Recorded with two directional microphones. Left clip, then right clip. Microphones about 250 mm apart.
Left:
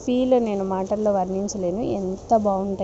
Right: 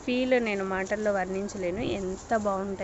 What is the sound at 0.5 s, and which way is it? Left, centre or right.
Speech, right.